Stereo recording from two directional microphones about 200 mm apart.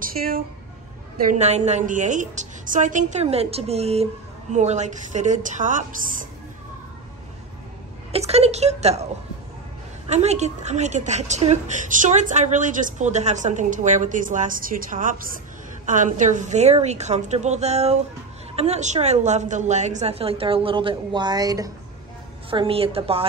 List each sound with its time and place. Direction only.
0.0 s a sound: 45° right (ahead or behind)
1.1 s a woman's voice: 40° right (ahead or behind)
8.1 s a woman's voice: 30° right (ahead or behind)
10.0 s a woman's voice: 35° right (ahead or behind)